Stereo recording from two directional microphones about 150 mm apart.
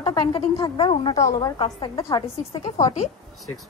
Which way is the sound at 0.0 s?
30° left (ahead or behind).